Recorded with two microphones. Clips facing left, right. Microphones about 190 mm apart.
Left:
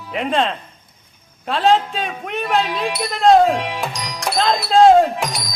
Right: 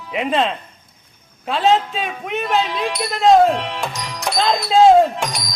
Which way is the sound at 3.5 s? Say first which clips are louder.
Left 1 dB; 10° left (ahead or behind).